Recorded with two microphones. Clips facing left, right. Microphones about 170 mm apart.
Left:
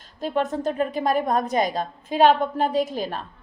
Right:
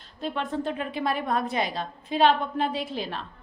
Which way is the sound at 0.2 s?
45° left (ahead or behind).